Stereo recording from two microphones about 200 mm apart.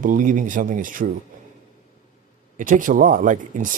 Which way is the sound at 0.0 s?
40° right (ahead or behind).